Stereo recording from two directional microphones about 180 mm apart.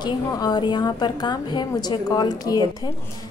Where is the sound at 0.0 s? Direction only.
20° left (ahead or behind).